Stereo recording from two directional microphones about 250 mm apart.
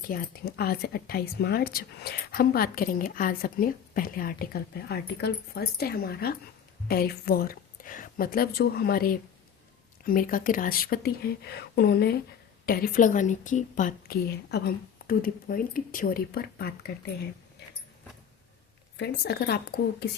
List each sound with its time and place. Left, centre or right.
0.1 s a woman's voice: left
18.9 s a woman's voice: left